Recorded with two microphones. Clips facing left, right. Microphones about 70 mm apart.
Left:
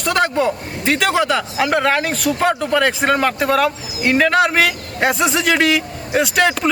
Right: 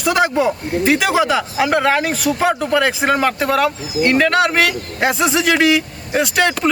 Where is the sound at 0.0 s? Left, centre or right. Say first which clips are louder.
Right 1 dB; centre.